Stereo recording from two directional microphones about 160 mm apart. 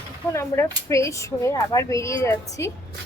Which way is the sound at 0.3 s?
15° left (ahead or behind).